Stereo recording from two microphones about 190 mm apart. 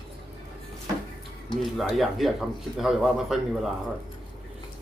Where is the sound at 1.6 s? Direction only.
Centre (ahead or behind).